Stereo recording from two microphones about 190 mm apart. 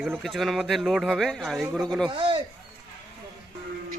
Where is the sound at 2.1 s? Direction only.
25° right (ahead or behind).